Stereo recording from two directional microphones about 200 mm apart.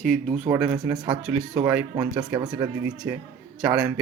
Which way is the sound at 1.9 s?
20° right (ahead or behind).